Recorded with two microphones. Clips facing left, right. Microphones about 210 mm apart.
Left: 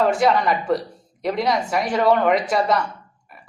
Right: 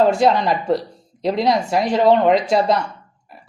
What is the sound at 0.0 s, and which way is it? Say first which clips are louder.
Speech: right 3 dB; 25° right (ahead or behind).